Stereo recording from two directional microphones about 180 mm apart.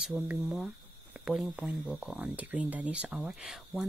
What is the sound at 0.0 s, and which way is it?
Speech, centre (ahead or behind).